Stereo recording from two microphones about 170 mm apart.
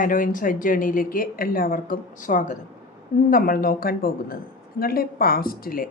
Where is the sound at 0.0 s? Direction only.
50° left (ahead or behind).